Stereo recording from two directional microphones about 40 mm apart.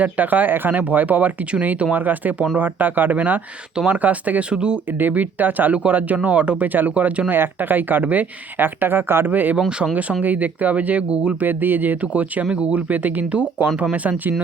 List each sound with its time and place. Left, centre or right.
0.0 s speech: right
4.9 s speech: right
6.2 s speech: right
6.7 s speech: right
7.3 s speech: right
9.2 s speech: right
9.6 s speech: right
9.9 s speech: right
11.4 s speech: right
11.9 s speech: right
12.5 s speech: right